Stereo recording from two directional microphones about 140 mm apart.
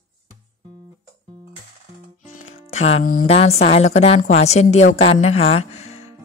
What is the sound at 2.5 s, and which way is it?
Music, 50° left (ahead or behind).